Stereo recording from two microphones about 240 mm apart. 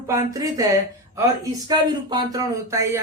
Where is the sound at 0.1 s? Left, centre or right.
Centre.